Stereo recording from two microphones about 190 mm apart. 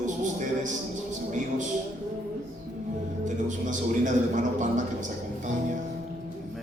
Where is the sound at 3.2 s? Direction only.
40° right (ahead or behind).